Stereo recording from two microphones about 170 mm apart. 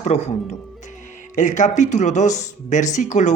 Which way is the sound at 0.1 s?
40° left (ahead or behind).